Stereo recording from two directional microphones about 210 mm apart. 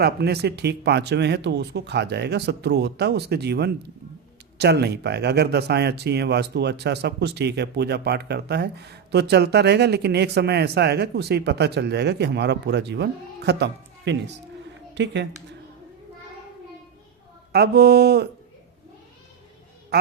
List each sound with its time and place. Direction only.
0.0 s a woman's voice: 50° right (ahead or behind)
17.5 s speech: 50° right (ahead or behind)